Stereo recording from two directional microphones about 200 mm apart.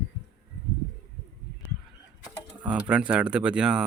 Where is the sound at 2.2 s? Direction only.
5° right (ahead or behind).